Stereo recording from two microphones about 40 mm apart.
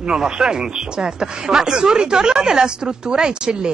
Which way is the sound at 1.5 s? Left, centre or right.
Centre.